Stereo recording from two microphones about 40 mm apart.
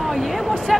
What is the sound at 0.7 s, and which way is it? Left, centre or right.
Speech, centre.